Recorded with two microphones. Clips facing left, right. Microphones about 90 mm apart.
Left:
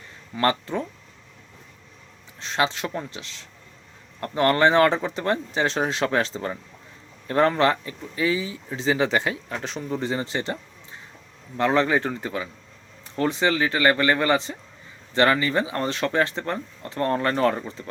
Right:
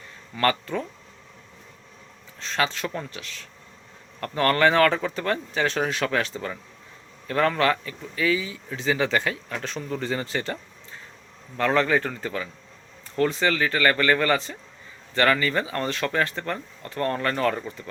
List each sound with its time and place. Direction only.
0.3 s speech: 25° left (ahead or behind)
2.4 s speech: 20° left (ahead or behind)